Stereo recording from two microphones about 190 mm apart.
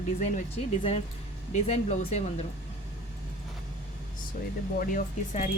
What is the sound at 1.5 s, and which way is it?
Speech, 35° left (ahead or behind).